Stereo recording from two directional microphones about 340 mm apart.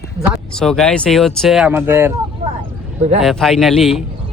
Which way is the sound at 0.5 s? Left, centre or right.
Centre.